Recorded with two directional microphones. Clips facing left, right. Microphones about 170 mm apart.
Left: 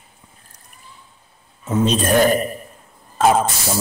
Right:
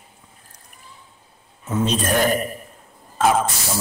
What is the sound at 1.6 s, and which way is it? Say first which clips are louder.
A man's voice: left 3 dB; 25° left (ahead or behind).